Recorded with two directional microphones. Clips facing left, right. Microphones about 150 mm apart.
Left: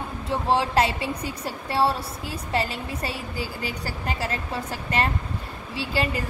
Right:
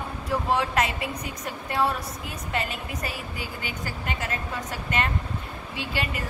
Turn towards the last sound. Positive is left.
turn(degrees=30)  # may be behind; listen again after turning